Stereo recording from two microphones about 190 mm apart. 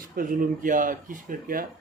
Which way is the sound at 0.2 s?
45° right (ahead or behind).